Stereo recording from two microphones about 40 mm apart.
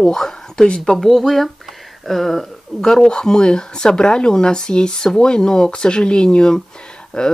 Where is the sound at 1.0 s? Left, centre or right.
Centre.